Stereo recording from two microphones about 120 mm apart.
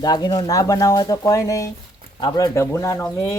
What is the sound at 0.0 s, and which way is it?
Speech, 30° left (ahead or behind).